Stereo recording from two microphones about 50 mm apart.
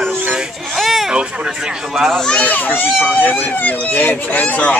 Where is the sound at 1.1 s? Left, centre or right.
Centre.